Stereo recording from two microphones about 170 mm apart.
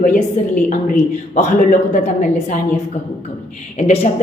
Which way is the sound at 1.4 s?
50° left (ahead or behind).